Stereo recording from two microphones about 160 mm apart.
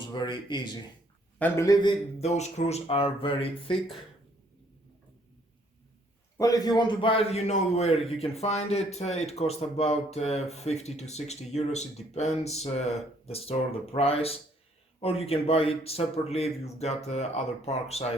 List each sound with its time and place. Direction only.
0.1 s speech: 30° left (ahead or behind)
1.4 s speech: 15° left (ahead or behind)
2.2 s a man's voice: 45° left (ahead or behind)
6.3 s a man's voice: 20° left (ahead or behind); by 18.0 s 40° left (ahead or behind)